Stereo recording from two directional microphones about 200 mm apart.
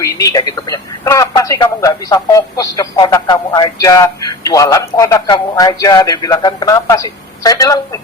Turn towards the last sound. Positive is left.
turn(degrees=15)  # may be behind; listen again after turning